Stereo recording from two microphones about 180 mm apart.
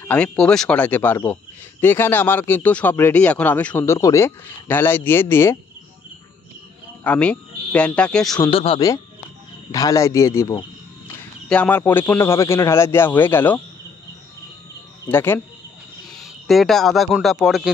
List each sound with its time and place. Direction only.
0.0 s speech: 5° left (ahead or behind)
7.0 s speech: 5° left (ahead or behind)
8.4 s speech: 30° left (ahead or behind)
9.7 s speech: 20° left (ahead or behind)
15.0 s speech: 10° left (ahead or behind)
16.2 s a man's voice: centre (ahead or behind)